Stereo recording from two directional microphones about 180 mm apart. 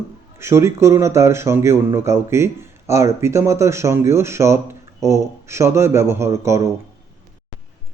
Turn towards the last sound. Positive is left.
turn(degrees=-15)  # may be behind; listen again after turning